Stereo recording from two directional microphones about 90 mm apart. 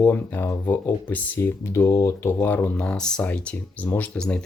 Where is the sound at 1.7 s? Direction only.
30° left (ahead or behind).